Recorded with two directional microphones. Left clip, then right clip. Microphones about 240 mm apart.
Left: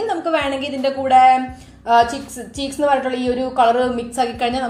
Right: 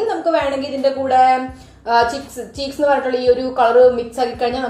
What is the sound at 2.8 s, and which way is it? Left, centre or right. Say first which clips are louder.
A woman's voice: right 3 dB; left.